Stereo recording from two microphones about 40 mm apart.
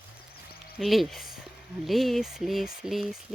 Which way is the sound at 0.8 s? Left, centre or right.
Centre.